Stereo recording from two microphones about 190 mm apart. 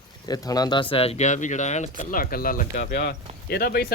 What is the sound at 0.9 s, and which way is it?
Speech, 30° left (ahead or behind).